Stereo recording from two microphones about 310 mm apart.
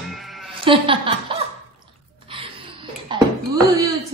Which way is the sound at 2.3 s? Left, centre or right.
Centre.